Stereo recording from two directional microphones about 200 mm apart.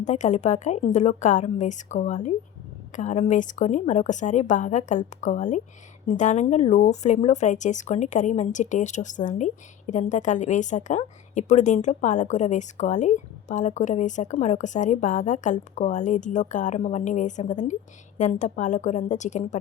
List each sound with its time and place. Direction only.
0.0 s a woman's voice: 35° left (ahead or behind)